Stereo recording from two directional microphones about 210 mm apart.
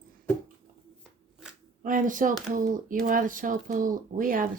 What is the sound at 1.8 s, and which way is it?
Speech, 40° right (ahead or behind).